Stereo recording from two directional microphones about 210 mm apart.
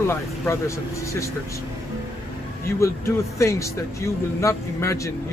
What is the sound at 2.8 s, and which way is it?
Speech, 15° left (ahead or behind).